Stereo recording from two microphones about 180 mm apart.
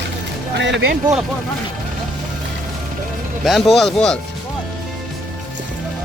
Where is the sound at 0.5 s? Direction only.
75° right (ahead or behind).